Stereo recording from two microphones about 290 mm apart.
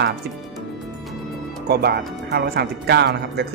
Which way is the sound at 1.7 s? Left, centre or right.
Right.